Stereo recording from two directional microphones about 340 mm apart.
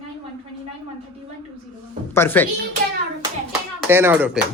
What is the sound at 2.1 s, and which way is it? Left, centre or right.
Speech, centre.